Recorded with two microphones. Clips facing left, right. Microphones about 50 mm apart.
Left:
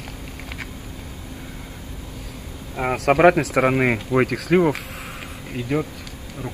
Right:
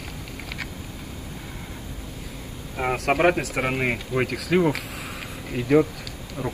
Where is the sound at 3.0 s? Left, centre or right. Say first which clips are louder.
Left 6 dB; left.